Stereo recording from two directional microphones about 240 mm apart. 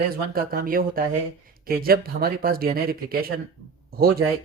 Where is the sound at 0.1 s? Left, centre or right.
Right.